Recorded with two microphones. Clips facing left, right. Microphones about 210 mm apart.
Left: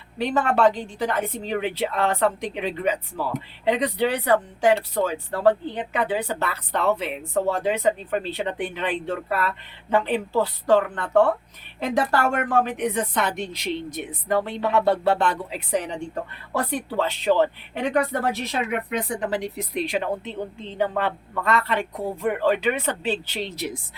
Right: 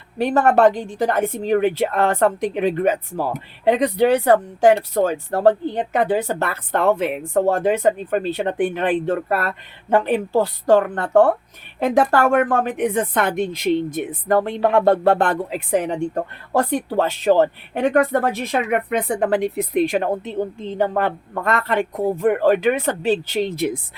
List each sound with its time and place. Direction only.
0.2 s a woman's voice: 45° right (ahead or behind)